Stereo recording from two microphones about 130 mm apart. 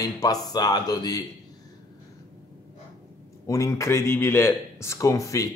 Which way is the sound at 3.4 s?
25° left (ahead or behind).